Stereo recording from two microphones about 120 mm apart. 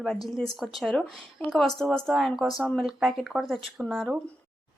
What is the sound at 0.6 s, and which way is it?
A woman's voice, centre (ahead or behind).